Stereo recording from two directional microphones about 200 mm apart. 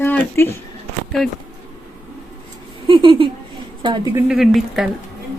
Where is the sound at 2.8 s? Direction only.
25° right (ahead or behind).